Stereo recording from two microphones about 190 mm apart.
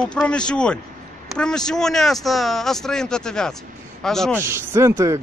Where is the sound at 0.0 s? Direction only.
5° left (ahead or behind).